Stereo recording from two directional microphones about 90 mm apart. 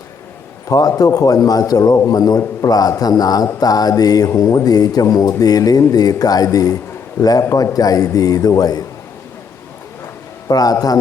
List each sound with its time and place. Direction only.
0.7 s mantra: 40° left (ahead or behind)
10.5 s mantra: 45° left (ahead or behind)